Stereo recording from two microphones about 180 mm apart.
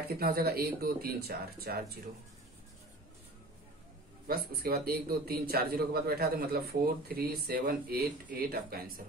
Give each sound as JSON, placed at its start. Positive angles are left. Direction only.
{"t": 0.2, "sound": "a man's voice", "side_deg": -60}
{"t": 4.3, "sound": "a man's voice", "side_deg": -55}